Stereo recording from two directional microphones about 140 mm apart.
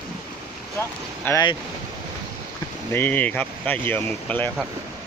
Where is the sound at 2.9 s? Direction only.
15° left (ahead or behind).